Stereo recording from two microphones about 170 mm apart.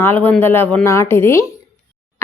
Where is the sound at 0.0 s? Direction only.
10° left (ahead or behind).